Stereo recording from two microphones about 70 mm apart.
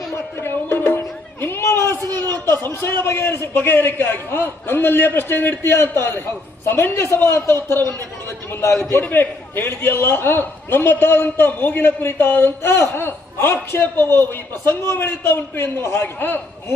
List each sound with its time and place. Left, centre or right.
0.3 s music: left
2.2 s a man's voice: left
9.0 s a man's voice: left